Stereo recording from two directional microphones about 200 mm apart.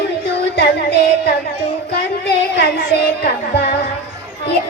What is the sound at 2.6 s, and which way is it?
A child's voice, 55° left (ahead or behind).